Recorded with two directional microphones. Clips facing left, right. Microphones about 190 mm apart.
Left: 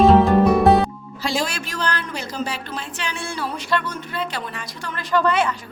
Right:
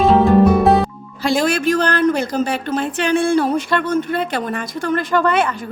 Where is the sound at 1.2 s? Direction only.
55° right (ahead or behind).